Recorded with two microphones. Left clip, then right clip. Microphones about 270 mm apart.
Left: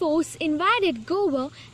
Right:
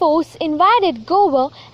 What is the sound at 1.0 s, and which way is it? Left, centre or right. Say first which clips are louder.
Speech: right 10 dB; left.